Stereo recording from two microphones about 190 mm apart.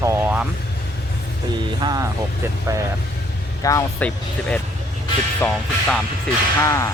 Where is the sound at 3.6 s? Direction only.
15° left (ahead or behind).